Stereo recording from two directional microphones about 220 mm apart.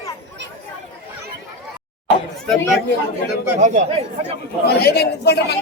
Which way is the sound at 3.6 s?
35° right (ahead or behind).